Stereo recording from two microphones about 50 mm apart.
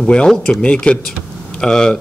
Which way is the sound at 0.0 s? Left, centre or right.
Centre.